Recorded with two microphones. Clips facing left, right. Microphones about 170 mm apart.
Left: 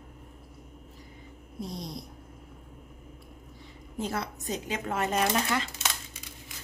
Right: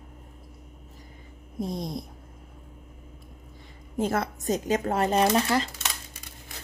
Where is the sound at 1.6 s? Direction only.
50° right (ahead or behind).